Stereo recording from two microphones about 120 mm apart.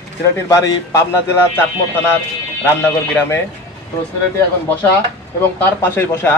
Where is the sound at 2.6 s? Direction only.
20° left (ahead or behind).